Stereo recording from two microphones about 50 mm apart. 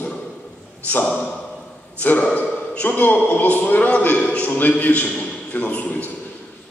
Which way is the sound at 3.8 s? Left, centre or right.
Left.